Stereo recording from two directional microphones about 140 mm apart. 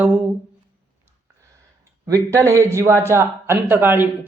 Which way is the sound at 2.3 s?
20° right (ahead or behind).